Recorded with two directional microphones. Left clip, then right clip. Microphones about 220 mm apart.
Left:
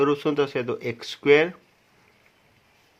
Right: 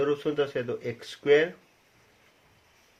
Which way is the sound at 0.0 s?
45° left (ahead or behind).